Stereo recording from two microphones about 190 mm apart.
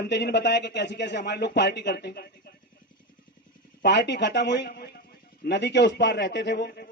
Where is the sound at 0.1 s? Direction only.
65° left (ahead or behind).